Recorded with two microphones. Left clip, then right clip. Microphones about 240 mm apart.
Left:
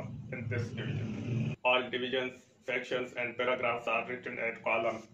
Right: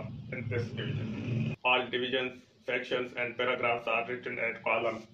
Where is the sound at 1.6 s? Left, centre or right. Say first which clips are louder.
Right 1 dB; centre.